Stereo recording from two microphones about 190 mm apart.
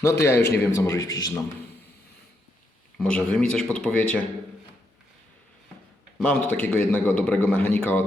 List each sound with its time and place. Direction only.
0.0 s a man's voice: 15° left (ahead or behind)
3.0 s speech: 5° left (ahead or behind)
6.1 s a man's voice: 5° left (ahead or behind)